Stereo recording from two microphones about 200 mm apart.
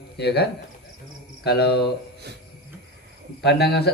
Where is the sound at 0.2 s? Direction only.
55° left (ahead or behind).